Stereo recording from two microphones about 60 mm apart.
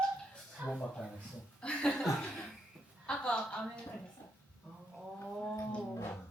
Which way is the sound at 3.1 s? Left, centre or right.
Centre.